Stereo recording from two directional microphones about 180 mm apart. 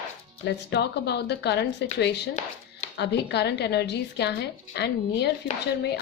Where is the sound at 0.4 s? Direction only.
70° left (ahead or behind).